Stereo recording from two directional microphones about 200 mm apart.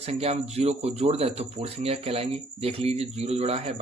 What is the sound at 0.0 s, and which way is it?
Speech, 30° right (ahead or behind).